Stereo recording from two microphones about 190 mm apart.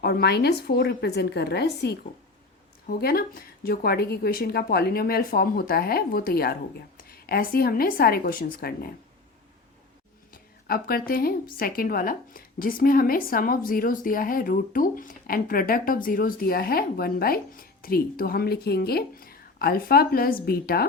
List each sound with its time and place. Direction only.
0.0 s a woman's voice: 60° left (ahead or behind)
10.3 s a woman's voice: 50° left (ahead or behind)